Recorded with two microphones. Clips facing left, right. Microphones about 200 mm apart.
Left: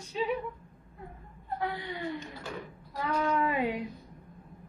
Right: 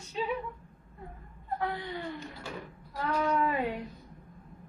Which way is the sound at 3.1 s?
10° left (ahead or behind).